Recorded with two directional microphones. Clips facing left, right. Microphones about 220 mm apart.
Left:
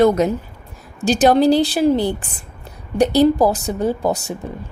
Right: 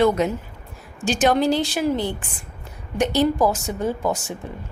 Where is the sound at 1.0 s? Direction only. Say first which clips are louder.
Left 5 dB; 35° left (ahead or behind).